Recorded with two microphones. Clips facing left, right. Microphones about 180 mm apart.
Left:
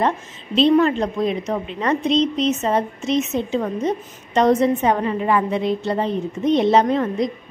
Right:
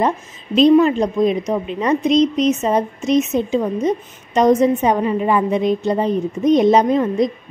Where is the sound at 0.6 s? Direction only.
15° right (ahead or behind).